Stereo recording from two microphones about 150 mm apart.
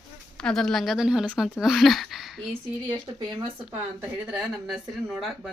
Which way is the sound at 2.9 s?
30° right (ahead or behind).